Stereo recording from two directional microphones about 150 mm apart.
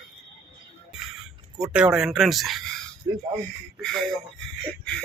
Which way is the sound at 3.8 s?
Centre (ahead or behind).